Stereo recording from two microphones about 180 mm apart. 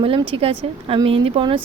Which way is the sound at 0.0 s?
30° right (ahead or behind).